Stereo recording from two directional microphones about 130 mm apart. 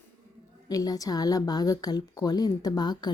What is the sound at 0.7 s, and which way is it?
A woman's voice, 30° left (ahead or behind).